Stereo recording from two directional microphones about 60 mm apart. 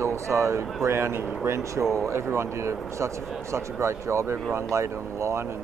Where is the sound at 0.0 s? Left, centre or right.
Right.